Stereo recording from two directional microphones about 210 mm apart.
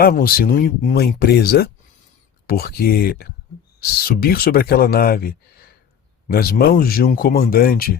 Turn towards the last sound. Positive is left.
turn(degrees=45)  # may be behind; listen again after turning